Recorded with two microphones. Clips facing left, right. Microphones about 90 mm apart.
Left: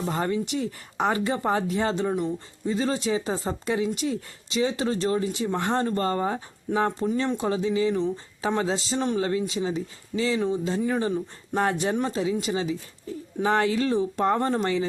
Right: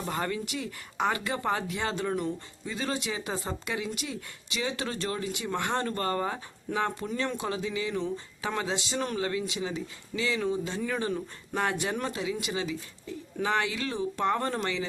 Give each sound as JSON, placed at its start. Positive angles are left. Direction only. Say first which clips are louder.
{"t": 0.0, "sound": "speech", "louder": "left 5 dB", "side_deg": 25}